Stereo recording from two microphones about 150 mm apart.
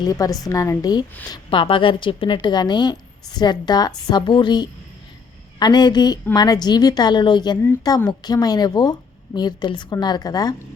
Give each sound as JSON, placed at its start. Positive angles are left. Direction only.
{"t": 0.0, "sound": "a woman's voice", "side_deg": 25}